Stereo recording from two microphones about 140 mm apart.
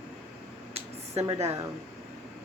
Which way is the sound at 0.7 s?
50° right (ahead or behind).